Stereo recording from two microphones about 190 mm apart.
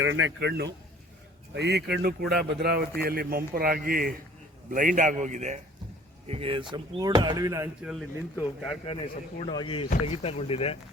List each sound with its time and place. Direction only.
0.0 s speech: 85° right
0.3 s a man's voice: 60° right (ahead or behind); by 8.8 s 5° right (ahead or behind)
8.9 s speech: 30° left (ahead or behind)